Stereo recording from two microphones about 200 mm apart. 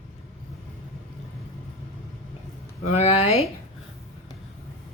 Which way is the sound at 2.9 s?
30° left (ahead or behind).